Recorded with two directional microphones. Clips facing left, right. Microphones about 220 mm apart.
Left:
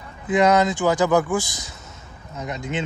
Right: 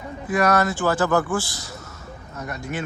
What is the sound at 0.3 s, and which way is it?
Speech, 20° left (ahead or behind).